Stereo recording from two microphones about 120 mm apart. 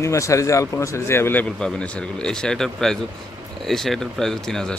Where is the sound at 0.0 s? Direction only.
25° left (ahead or behind); by 4.7 s 5° left (ahead or behind).